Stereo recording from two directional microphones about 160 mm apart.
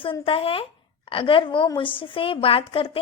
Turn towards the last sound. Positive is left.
turn(degrees=35)  # may be behind; listen again after turning